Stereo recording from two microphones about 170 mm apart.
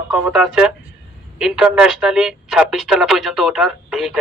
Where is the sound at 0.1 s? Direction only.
5° right (ahead or behind).